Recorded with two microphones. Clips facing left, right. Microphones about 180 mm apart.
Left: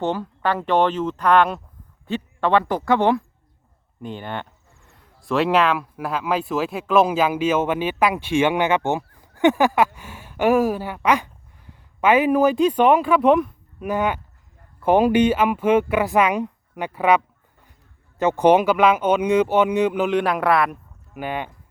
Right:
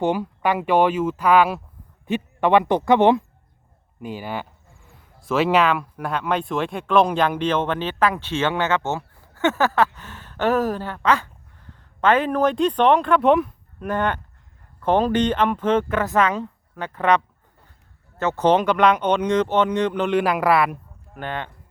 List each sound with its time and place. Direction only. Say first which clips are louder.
0.0 s speech: right 2 dB; 10° right (ahead or behind)
4.0 s speech: right 1 dB; 5° right (ahead or behind)
21.2 s speech: left 2 dB; 10° left (ahead or behind)